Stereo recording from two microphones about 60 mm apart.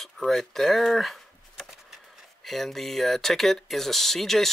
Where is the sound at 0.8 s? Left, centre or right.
Centre.